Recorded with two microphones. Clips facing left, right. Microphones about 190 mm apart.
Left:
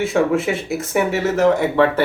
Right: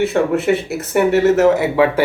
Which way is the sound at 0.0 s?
Centre (ahead or behind).